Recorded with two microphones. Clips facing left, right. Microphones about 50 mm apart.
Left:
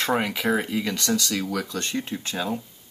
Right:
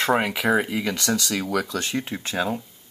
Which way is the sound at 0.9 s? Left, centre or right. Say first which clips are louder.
Right 1 dB; right.